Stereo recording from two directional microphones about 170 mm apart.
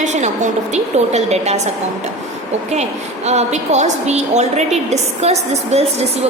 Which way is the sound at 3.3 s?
40° right (ahead or behind).